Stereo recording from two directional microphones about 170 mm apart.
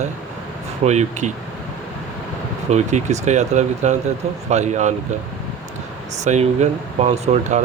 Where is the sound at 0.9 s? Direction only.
40° right (ahead or behind).